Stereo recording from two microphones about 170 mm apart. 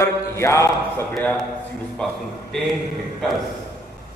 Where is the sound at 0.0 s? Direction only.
15° left (ahead or behind).